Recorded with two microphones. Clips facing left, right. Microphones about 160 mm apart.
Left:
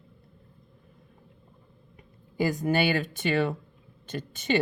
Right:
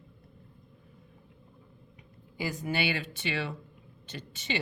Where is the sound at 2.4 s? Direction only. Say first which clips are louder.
Left 7 dB; 45° left (ahead or behind).